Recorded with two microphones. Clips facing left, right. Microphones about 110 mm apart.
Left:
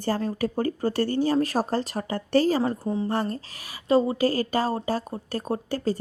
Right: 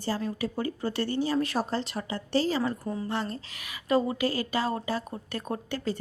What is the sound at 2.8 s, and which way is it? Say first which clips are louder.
Speech: left 6 dB; 25° left (ahead or behind).